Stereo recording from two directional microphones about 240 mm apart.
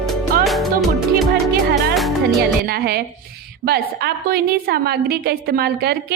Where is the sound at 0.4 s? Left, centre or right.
Centre.